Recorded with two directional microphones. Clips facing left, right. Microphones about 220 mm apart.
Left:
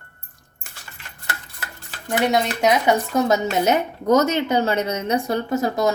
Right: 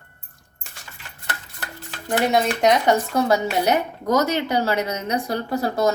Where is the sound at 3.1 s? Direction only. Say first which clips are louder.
Left 1 dB; 20° left (ahead or behind).